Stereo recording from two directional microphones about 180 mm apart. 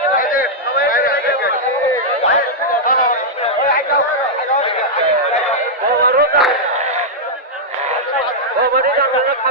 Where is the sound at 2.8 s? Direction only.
50° left (ahead or behind).